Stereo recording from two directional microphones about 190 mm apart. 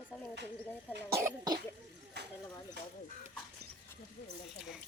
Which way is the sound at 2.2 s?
60° right (ahead or behind).